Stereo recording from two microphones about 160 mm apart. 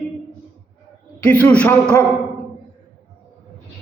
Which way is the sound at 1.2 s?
10° left (ahead or behind).